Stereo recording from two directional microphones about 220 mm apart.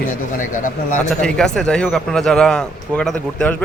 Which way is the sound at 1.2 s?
5° left (ahead or behind).